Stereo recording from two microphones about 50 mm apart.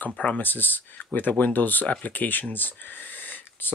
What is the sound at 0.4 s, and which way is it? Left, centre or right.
Speech, left.